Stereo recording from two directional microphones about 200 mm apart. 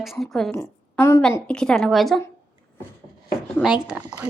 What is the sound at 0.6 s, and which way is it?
A woman's voice, 15° left (ahead or behind).